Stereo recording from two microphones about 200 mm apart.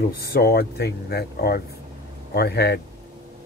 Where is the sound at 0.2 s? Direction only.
50° left (ahead or behind).